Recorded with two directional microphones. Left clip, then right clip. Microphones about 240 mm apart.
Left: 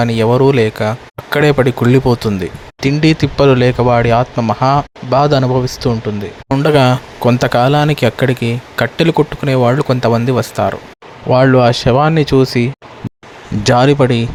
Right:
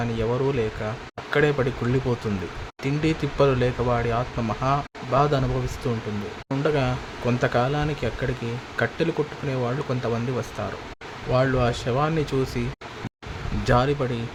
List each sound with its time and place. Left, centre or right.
0.0 s speech: left
13.7 s speech: left